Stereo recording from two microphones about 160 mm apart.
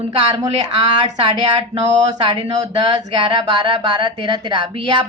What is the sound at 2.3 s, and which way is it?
Speech, 40° right (ahead or behind).